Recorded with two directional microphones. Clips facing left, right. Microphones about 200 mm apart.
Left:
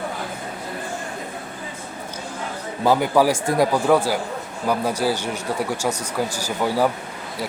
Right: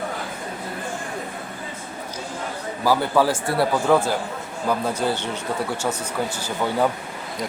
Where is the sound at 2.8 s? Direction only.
15° left (ahead or behind).